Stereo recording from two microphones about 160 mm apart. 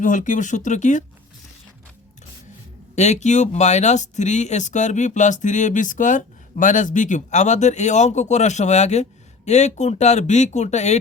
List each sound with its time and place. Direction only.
0.0 s speech: 55° left (ahead or behind)
2.9 s speech: 45° left (ahead or behind)